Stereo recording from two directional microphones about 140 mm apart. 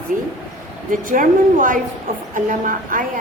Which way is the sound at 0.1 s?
70° right (ahead or behind).